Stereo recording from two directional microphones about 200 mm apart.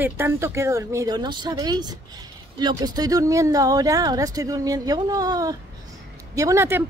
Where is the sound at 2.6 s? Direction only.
20° right (ahead or behind).